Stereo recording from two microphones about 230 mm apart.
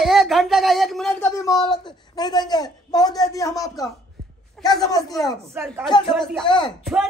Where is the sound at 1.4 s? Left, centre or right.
Centre.